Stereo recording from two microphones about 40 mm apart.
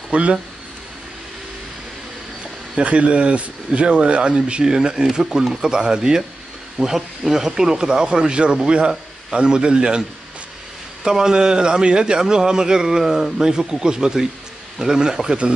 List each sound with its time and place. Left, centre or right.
0.1 s speech: right
2.7 s speech: right; by 5.7 s centre
5.7 s speech: centre
11.1 s speech: centre